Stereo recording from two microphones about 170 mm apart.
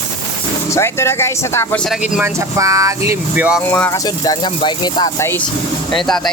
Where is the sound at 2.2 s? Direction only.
15° right (ahead or behind).